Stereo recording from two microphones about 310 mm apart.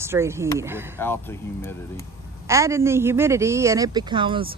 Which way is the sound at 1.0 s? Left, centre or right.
Centre.